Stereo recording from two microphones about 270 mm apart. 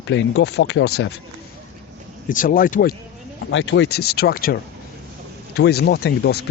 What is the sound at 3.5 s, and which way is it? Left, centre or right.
Speech, left.